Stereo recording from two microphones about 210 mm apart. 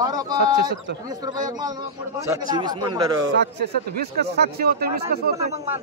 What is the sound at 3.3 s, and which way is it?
Speech, 50° right (ahead or behind).